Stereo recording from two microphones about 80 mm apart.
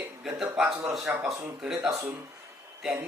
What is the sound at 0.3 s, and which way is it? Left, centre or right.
Speech, centre.